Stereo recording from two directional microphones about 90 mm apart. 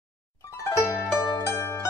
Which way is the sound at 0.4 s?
35° left (ahead or behind).